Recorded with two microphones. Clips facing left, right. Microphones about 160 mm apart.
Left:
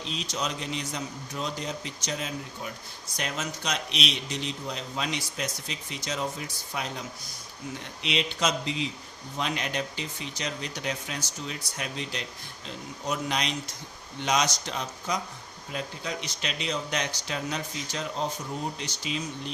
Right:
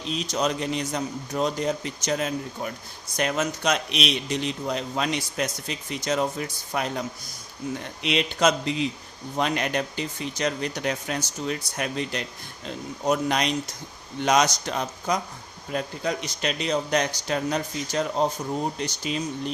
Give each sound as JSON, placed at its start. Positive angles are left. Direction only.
{"t": 0.3, "sound": "a man's voice", "side_deg": -50}
{"t": 8.0, "sound": "a man's voice", "side_deg": -55}